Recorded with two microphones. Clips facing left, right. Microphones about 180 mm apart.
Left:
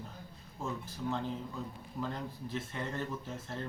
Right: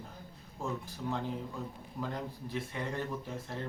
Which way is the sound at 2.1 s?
10° right (ahead or behind).